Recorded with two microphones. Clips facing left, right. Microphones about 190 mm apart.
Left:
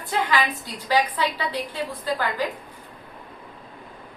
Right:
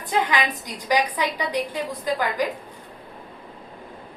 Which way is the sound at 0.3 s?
15° right (ahead or behind).